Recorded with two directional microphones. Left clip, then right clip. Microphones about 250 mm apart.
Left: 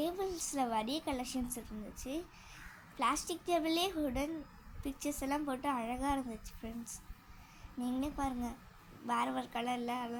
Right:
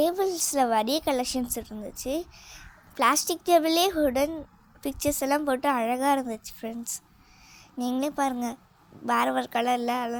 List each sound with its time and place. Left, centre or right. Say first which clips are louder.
0.0 s a woman's voice: right 13 dB; right